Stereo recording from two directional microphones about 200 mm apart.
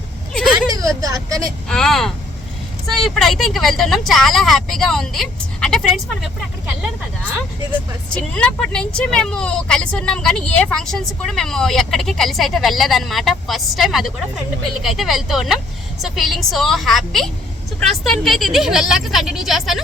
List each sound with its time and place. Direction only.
0.7 s speech: 15° right (ahead or behind)
1.6 s a woman's voice: centre (ahead or behind)
8.1 s a woman's voice: 5° left (ahead or behind)